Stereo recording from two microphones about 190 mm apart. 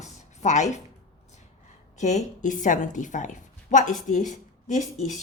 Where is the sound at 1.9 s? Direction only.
40° left (ahead or behind).